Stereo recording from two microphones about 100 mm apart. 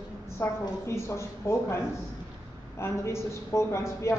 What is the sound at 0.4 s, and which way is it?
A man's voice, 25° left (ahead or behind).